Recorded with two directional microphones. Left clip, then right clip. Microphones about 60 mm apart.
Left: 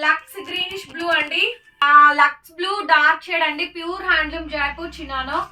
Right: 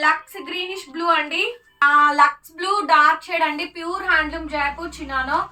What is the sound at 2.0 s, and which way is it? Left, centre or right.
Speech, right.